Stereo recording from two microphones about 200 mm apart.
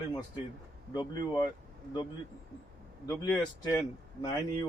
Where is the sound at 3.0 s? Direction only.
10° left (ahead or behind).